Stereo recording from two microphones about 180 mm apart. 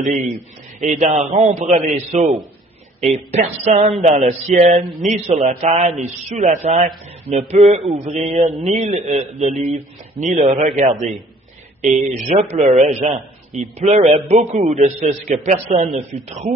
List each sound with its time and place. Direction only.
0.0 s a man's voice: 45° right (ahead or behind)
12.3 s a man's voice: 40° right (ahead or behind)